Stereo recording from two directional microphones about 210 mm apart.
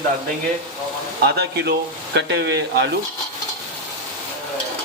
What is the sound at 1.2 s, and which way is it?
Speech, 55° right (ahead or behind).